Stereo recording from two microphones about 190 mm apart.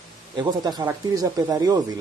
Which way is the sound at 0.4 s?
20° right (ahead or behind).